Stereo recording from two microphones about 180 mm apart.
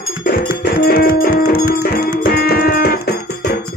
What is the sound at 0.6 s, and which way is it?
Music, 60° left (ahead or behind).